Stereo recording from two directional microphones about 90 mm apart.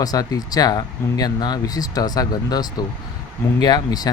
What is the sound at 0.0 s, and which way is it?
Speech, 45° left (ahead or behind).